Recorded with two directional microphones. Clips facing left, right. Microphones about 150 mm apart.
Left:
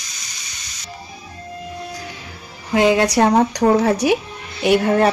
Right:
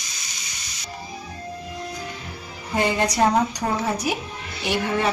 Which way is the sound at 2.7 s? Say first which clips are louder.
Left 7 dB; 90° left.